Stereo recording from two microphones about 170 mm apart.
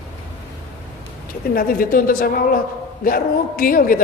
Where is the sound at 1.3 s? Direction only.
60° left (ahead or behind).